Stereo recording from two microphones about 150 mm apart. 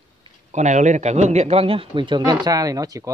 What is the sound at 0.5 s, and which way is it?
A man's voice, 50° right (ahead or behind).